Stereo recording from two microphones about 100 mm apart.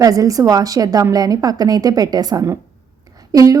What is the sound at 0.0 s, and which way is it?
A woman's voice, 35° right (ahead or behind).